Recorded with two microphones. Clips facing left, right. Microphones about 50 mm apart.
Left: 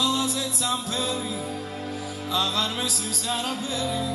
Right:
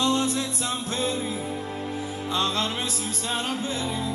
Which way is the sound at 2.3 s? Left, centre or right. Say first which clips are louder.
Even; right.